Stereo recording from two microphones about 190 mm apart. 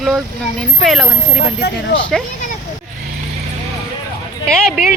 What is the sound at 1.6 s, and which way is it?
Speech, 60° left (ahead or behind).